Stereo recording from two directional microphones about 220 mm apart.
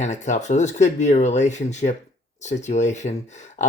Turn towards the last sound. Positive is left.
turn(degrees=30)  # may be behind; listen again after turning